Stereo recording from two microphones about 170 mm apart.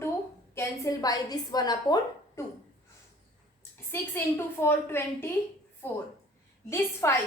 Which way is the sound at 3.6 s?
15° left (ahead or behind).